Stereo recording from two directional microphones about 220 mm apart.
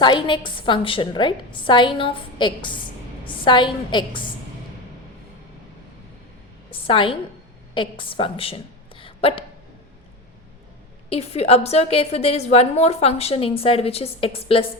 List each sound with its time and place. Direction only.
0.0 s a woman's voice: 20° left (ahead or behind)
6.7 s a woman's voice: 25° left (ahead or behind)
11.1 s a woman's voice: 25° left (ahead or behind)